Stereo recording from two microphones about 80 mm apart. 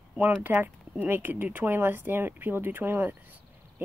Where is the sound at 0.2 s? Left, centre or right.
Right.